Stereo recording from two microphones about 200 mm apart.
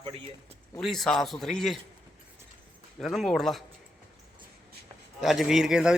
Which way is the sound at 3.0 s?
Centre (ahead or behind).